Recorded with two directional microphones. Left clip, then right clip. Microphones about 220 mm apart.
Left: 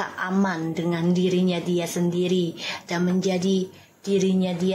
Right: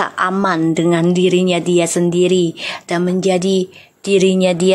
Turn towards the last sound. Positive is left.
turn(degrees=-45)  # may be behind; listen again after turning